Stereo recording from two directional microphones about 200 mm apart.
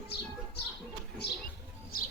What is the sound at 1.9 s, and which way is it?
Bird, 45° left (ahead or behind).